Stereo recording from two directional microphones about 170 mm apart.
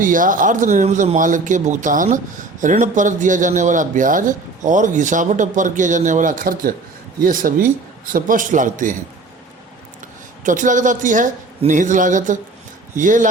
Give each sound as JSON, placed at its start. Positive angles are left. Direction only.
{"t": 0.0, "sound": "speech", "side_deg": -50}
{"t": 10.4, "sound": "speech", "side_deg": -50}